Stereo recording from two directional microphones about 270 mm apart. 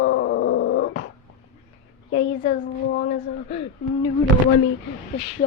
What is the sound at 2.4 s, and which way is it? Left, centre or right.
Speech, left.